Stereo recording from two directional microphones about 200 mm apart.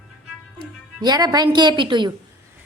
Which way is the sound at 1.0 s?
20° right (ahead or behind).